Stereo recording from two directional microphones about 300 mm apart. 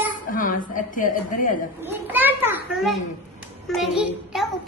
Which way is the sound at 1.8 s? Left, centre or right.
Centre.